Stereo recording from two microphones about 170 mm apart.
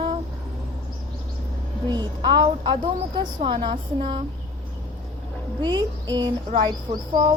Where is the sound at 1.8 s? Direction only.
25° right (ahead or behind).